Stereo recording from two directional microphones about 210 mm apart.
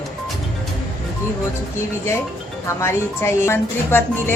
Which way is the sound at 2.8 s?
10° left (ahead or behind).